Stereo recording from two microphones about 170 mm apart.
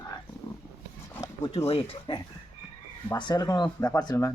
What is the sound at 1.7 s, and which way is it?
Speech, 35° left (ahead or behind).